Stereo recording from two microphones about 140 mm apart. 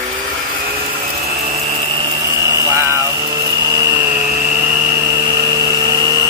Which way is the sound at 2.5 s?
20° right (ahead or behind).